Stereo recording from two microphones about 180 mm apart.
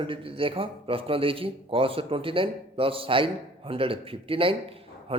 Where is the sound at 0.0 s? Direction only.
30° right (ahead or behind).